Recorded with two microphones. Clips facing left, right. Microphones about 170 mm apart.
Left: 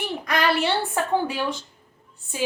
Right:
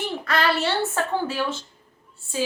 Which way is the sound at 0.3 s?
15° left (ahead or behind).